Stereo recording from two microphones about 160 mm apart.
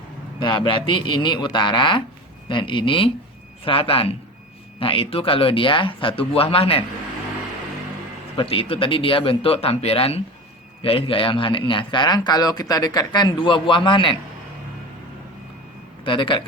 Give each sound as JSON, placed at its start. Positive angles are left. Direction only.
{"t": 0.3, "sound": "a man's voice", "side_deg": 30}
{"t": 8.4, "sound": "a man's voice", "side_deg": 35}
{"t": 16.0, "sound": "a man's voice", "side_deg": 30}